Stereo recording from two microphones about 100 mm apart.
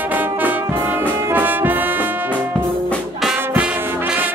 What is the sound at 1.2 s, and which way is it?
Trombone, 20° right (ahead or behind).